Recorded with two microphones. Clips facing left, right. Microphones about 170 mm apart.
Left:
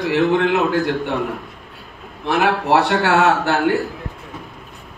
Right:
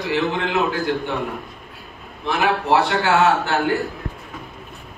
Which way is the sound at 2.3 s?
65° left (ahead or behind).